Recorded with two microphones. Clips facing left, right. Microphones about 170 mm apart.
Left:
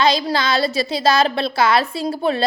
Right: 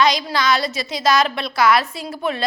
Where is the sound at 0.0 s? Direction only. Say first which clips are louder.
Left 1 dB; 30° left (ahead or behind).